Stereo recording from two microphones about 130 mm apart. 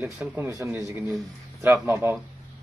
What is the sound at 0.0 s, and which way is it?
Speech, 15° right (ahead or behind).